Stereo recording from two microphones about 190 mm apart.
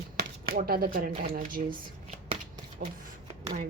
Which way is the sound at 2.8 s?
45° right (ahead or behind).